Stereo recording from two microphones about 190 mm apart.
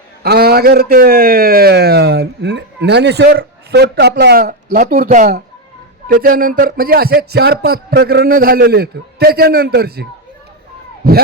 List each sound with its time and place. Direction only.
0.2 s a man's voice: 55° right (ahead or behind)